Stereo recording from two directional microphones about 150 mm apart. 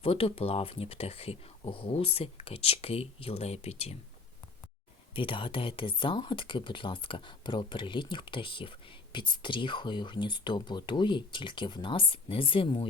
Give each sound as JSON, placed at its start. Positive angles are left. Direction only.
{"t": 0.0, "sound": "speech", "side_deg": 40}
{"t": 5.1, "sound": "speech", "side_deg": 35}